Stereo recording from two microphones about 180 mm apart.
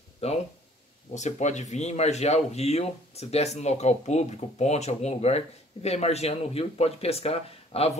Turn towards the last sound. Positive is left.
turn(degrees=35)  # may be behind; listen again after turning